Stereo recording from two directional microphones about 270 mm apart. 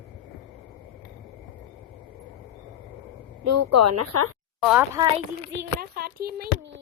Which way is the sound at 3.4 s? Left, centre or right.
Right.